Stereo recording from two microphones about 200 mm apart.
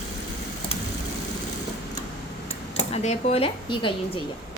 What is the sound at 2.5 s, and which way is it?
Speech, 30° left (ahead or behind).